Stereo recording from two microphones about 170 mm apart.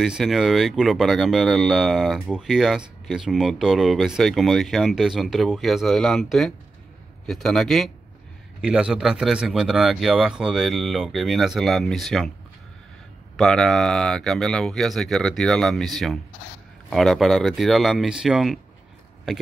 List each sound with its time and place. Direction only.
0.0 s speech: centre (ahead or behind)
13.4 s speech: centre (ahead or behind)